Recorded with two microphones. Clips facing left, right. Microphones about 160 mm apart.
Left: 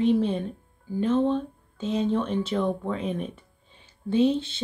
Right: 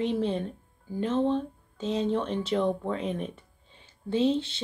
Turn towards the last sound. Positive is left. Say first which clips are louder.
# left 3 dB
turn(degrees=-25)  # may be behind; listen again after turning